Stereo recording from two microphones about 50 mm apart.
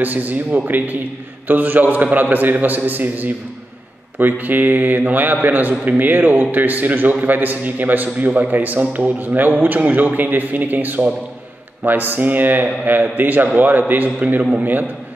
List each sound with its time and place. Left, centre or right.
0.0 s a man's voice: right